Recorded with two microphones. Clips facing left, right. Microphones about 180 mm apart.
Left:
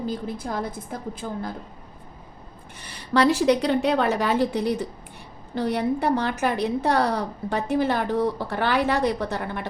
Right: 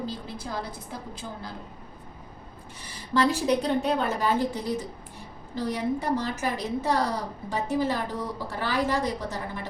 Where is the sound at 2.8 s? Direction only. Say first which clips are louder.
Left 4 dB; 75° left (ahead or behind).